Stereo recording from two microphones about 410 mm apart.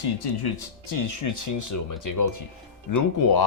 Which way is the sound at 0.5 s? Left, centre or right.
Left.